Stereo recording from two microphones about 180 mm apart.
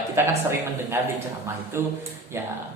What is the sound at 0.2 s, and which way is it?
Speech, 15° right (ahead or behind).